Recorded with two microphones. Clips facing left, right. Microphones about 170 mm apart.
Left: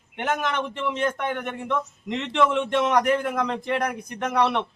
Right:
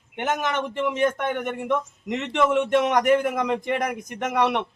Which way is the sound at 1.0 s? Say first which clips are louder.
Right 3 dB; 5° right (ahead or behind).